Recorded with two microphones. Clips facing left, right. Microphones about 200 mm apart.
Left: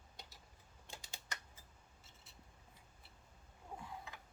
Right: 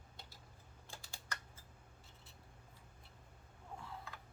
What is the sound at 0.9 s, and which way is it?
Typing, 20° left (ahead or behind).